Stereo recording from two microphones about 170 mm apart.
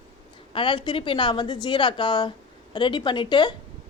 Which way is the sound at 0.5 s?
30° left (ahead or behind).